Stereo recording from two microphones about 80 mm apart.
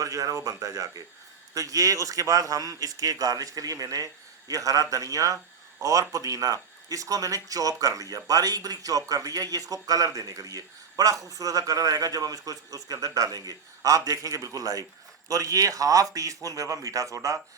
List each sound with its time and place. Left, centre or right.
0.0 s speech: right